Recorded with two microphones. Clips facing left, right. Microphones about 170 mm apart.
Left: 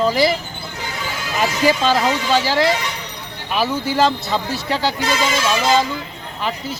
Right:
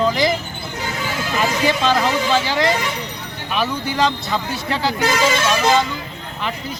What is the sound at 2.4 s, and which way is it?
Speech, 5° left (ahead or behind).